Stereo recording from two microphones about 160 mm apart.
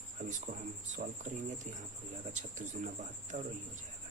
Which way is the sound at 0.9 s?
50° right (ahead or behind).